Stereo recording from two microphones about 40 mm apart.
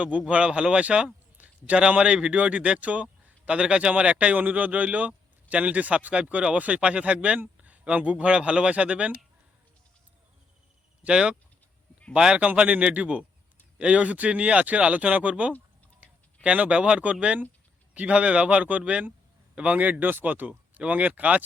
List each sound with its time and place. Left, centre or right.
0.3 s a man's voice: right
1.4 s a sound: right
2.0 s a man's voice: right
11.1 s a man's voice: right
20.5 s a man's voice: right